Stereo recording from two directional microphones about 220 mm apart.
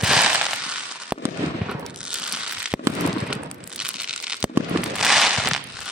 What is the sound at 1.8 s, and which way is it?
Fireworks, 5° right (ahead or behind).